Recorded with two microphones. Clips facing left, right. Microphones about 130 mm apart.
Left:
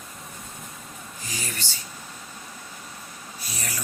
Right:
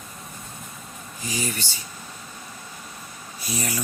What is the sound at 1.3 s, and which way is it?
Speech, 15° right (ahead or behind).